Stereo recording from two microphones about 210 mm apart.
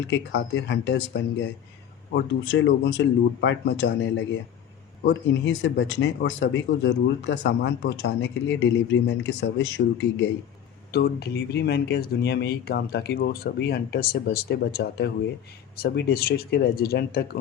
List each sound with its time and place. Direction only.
0.1 s speech: 55° left (ahead or behind)
5.0 s speech: 55° left (ahead or behind)